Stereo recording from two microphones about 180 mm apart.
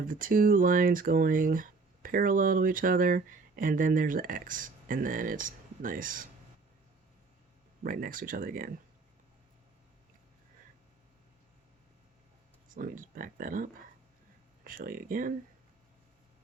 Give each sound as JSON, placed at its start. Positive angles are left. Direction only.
{"t": 0.1, "sound": "speech", "side_deg": -50}
{"t": 7.9, "sound": "speech", "side_deg": -50}
{"t": 12.6, "sound": "speech", "side_deg": -50}